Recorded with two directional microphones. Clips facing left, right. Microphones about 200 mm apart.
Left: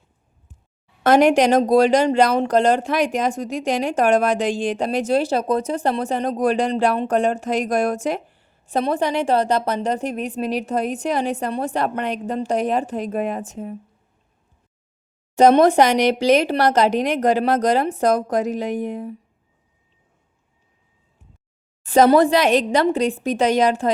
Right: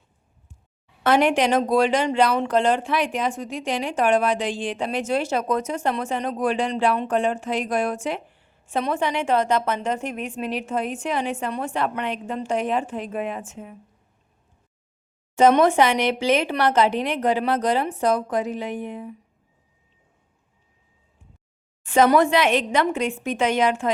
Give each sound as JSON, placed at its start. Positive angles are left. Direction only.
{"t": 1.0, "sound": "speech", "side_deg": 40}
{"t": 15.4, "sound": "speech", "side_deg": 40}
{"t": 21.8, "sound": "speech", "side_deg": 35}